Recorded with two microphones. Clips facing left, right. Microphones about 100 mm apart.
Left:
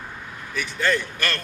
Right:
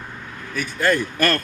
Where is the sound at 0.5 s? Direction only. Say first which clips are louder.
Right 3 dB; 45° right (ahead or behind).